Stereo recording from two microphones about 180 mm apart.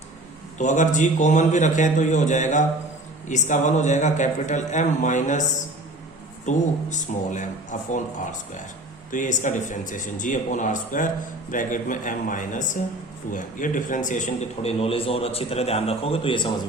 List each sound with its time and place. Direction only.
0.6 s a man's voice: 40° left (ahead or behind)